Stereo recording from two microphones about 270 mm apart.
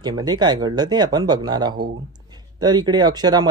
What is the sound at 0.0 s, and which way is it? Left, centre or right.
Speech, centre.